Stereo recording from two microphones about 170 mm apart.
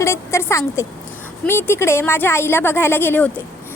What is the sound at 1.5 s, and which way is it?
A woman's voice, 15° left (ahead or behind).